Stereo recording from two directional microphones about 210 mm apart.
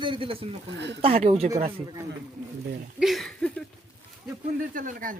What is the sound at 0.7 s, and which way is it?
Speech, 55° right (ahead or behind).